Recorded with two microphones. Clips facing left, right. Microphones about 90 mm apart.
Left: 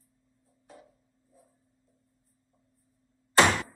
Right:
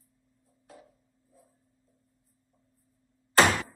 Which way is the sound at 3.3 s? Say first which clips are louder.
Even; 5° right (ahead or behind).